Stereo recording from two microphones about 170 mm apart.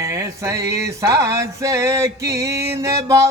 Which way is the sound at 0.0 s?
20° right (ahead or behind).